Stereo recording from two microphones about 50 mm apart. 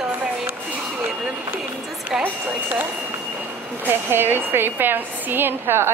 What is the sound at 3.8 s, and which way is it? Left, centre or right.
A woman's voice, right.